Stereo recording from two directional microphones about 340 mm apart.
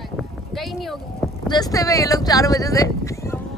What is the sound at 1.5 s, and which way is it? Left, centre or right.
Speech, centre.